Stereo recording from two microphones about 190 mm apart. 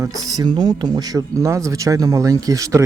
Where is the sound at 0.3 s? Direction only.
20° right (ahead or behind).